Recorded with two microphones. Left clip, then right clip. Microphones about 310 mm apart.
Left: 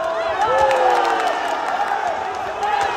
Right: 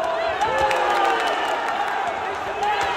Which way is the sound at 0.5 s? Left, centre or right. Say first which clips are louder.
Left 6 dB; left.